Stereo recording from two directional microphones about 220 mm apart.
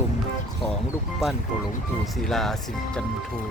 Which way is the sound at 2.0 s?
Centre (ahead or behind).